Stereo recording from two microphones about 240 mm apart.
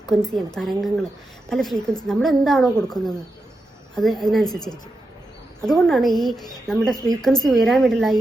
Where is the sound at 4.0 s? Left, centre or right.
Centre.